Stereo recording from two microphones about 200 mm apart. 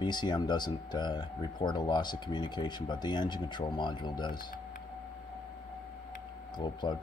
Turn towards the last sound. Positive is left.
turn(degrees=20)  # may be behind; listen again after turning